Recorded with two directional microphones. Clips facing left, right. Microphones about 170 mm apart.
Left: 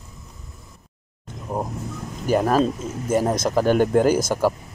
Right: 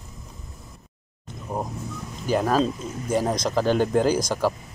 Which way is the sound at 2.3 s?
10° left (ahead or behind).